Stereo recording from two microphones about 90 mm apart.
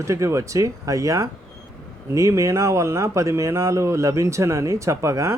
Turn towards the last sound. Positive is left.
turn(degrees=-35)  # may be behind; listen again after turning